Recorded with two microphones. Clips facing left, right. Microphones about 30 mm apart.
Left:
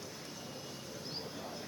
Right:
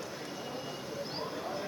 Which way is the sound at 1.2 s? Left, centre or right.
Right.